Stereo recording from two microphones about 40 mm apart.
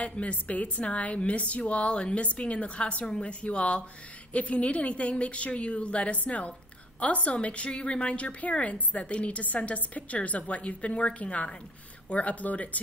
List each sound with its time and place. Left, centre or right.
0.0 s a woman's voice: left